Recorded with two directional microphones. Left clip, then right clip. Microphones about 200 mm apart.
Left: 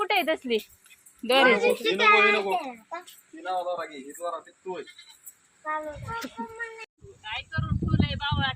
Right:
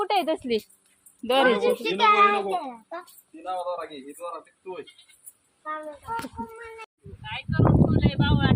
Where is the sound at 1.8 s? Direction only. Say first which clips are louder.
Right 3 dB; 55° right (ahead or behind).